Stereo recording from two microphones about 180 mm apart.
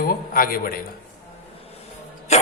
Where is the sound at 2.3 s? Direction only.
40° left (ahead or behind).